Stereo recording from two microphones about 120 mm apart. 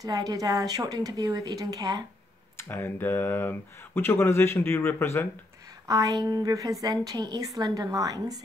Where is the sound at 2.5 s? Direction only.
20° left (ahead or behind).